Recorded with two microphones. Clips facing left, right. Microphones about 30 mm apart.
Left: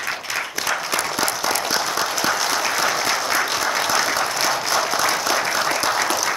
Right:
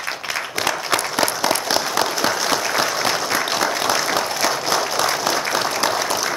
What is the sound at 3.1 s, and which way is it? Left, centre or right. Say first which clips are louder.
Applause: even; centre.